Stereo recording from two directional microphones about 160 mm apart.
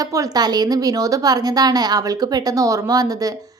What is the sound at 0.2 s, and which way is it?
A woman's voice, 25° right (ahead or behind).